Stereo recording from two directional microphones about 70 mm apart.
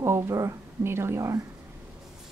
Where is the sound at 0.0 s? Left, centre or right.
Right.